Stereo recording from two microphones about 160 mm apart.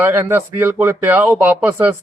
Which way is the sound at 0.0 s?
15° right (ahead or behind).